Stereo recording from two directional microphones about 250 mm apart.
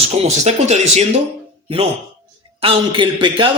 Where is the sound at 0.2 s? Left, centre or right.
Right.